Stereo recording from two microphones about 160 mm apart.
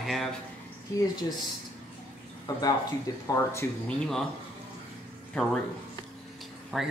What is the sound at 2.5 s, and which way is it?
Speech, 20° left (ahead or behind).